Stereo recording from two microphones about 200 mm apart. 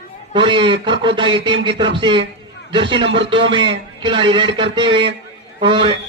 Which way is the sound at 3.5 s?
25° right (ahead or behind).